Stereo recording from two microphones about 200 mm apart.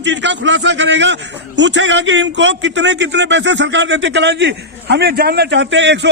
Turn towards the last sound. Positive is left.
turn(degrees=-65)  # may be behind; listen again after turning